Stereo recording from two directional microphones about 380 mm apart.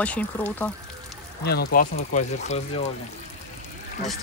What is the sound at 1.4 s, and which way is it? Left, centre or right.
Speech, left.